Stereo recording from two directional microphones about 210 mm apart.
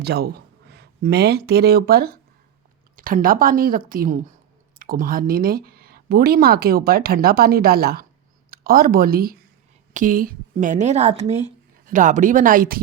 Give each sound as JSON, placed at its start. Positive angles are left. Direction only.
{"t": 0.0, "sound": "a woman's voice", "side_deg": -50}